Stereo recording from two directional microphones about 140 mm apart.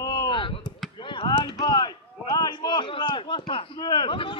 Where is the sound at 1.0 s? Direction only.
35° left (ahead or behind).